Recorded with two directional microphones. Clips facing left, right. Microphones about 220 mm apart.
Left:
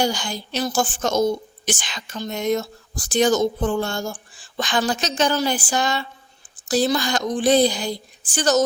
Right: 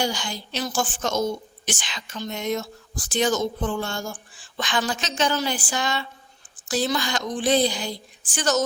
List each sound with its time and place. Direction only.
0.0 s a woman's voice: 45° left (ahead or behind)